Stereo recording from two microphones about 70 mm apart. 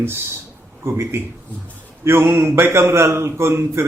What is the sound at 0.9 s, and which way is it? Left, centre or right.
A man's voice, right.